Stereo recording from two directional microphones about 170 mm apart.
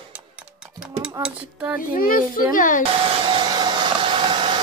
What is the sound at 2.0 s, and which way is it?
Speech, 55° left (ahead or behind).